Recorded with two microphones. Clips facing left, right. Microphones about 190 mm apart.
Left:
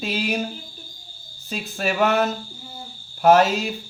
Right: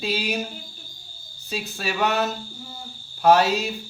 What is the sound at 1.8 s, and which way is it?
Speech, 50° left (ahead or behind).